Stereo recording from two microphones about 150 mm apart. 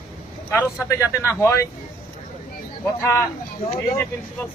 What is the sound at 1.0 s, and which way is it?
Speech, 20° left (ahead or behind).